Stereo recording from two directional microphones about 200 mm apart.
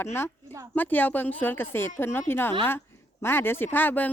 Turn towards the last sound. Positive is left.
turn(degrees=10)  # may be behind; listen again after turning